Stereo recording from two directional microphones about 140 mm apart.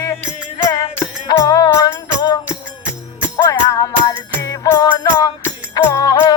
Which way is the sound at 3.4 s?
25° left (ahead or behind).